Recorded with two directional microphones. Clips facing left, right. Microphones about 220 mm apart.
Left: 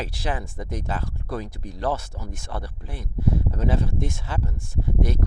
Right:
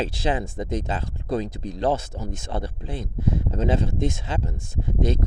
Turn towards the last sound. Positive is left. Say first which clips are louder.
# right 2 dB
turn(degrees=-20)  # may be behind; listen again after turning